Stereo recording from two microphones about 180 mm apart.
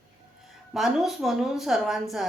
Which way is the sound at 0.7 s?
Centre (ahead or behind).